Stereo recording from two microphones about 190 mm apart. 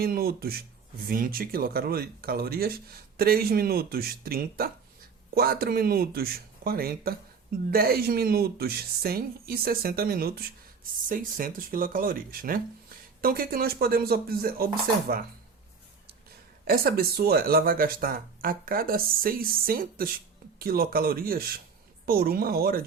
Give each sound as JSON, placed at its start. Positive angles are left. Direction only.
{"t": 0.0, "sound": "speech", "side_deg": -55}
{"t": 16.6, "sound": "speech", "side_deg": -55}